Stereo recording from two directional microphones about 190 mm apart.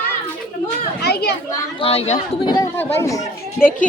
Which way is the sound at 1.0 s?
60° left (ahead or behind).